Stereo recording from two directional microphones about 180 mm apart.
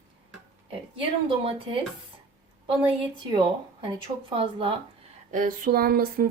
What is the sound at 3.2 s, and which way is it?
Speech, 30° right (ahead or behind).